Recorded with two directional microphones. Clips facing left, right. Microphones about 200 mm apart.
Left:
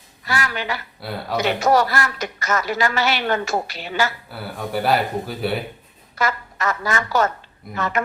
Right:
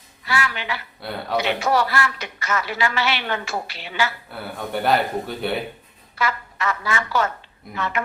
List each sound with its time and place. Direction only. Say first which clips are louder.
0.3 s speech: left 1 dB; 45° left (ahead or behind)
1.0 s speech: left 1 dB; centre (ahead or behind)
1.4 s speech: left 3 dB; 45° left (ahead or behind)
4.3 s speech: left 1 dB; centre (ahead or behind)
6.1 s speech: left 2 dB; 45° left (ahead or behind)